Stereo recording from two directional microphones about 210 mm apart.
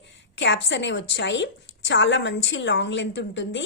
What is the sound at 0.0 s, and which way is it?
Speech, 55° left (ahead or behind).